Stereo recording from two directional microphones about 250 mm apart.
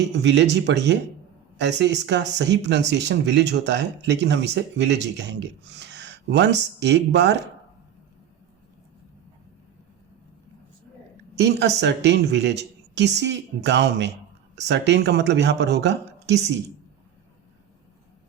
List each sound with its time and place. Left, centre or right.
0.0 s speech: right
11.3 s speech: right